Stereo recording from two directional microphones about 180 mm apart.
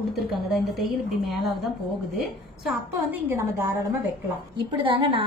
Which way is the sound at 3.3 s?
15° right (ahead or behind).